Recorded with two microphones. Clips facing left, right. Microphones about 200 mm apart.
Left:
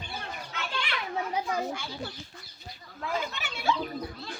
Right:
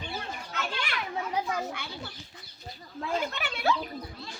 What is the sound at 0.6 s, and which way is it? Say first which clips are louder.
Children playing: right 1 dB; 45° right (ahead or behind).